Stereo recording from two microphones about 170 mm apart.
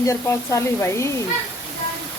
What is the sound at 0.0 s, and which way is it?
Speech, 15° left (ahead or behind).